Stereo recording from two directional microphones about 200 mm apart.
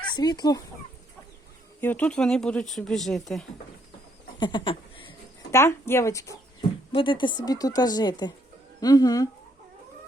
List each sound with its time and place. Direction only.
0.0 s speech: 20° left (ahead or behind)
1.8 s speech: 10° left (ahead or behind)
4.4 s a sound: 25° left (ahead or behind)
5.5 s speech: 15° left (ahead or behind)